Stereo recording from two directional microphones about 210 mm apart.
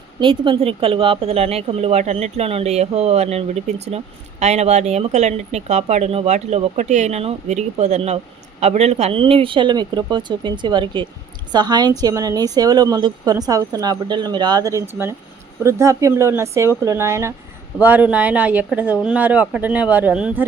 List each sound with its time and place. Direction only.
0.2 s a woman's voice: 25° right (ahead or behind); by 20.4 s 5° right (ahead or behind)